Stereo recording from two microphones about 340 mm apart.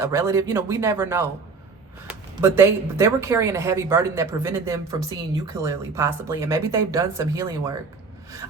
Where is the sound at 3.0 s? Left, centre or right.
Centre.